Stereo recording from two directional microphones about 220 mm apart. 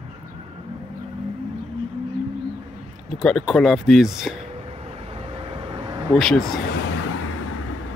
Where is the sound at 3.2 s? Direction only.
Centre (ahead or behind).